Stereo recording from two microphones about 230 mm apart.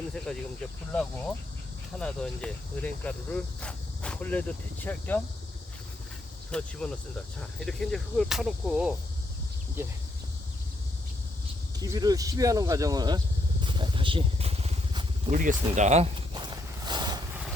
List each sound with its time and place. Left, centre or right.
0.3 s speech: centre
2.0 s speech: centre
6.5 s speech: centre
11.8 s vehicle: centre